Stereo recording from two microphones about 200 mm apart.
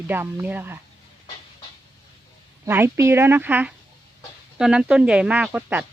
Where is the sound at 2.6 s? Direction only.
10° right (ahead or behind).